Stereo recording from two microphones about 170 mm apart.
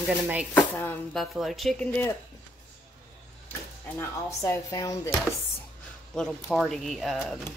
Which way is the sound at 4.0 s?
15° left (ahead or behind).